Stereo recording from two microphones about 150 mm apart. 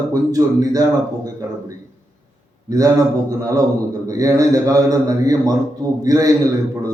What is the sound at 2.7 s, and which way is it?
Speech, 25° right (ahead or behind).